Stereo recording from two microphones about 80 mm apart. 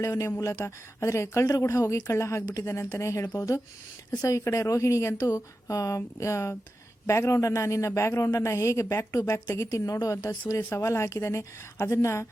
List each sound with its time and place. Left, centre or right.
0.0 s a woman's voice: left
9.8 s a woman's voice: left
10.6 s speech: left
10.8 s speech: left